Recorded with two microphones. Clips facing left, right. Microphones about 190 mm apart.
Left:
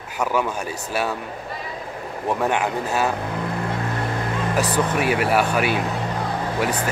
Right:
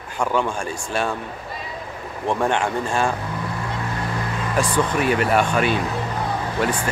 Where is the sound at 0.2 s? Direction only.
5° left (ahead or behind).